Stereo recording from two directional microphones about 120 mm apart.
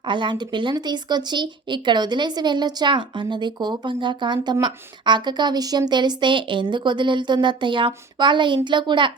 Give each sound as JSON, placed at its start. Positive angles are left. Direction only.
{"t": 0.0, "sound": "a woman's voice", "side_deg": -40}